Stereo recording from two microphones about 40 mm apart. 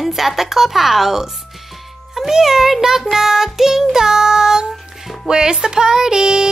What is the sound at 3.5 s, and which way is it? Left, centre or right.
Music, centre.